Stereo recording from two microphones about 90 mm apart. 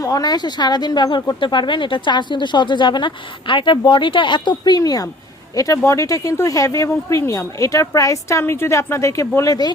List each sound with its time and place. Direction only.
0.0 s speech: 45° left (ahead or behind)